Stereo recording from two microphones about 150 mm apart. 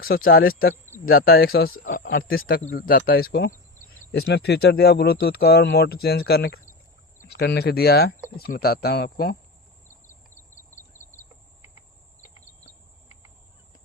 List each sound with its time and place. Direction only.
0.0 s speech: 80° left